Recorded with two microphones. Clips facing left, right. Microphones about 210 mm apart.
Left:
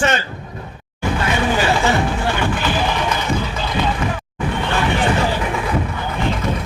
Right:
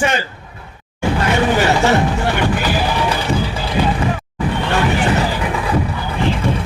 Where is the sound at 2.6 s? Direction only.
35° right (ahead or behind).